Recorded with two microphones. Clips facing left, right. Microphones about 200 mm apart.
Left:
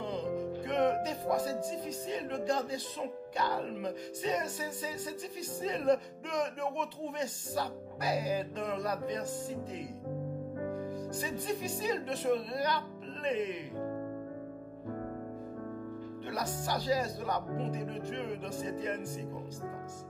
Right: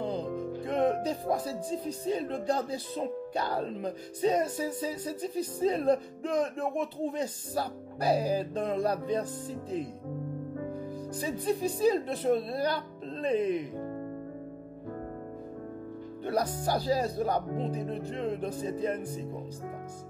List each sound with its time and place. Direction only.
0.0 s music: 35° right (ahead or behind)
11.1 s music: 35° right (ahead or behind)
16.6 s music: 35° right (ahead or behind)